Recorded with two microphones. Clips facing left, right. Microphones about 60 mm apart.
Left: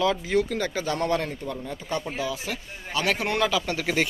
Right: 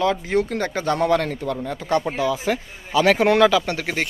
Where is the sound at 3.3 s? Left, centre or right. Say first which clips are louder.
Right 8 dB; right.